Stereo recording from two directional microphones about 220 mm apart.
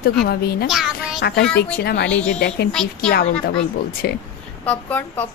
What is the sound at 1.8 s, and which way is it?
Speech, 50° left (ahead or behind).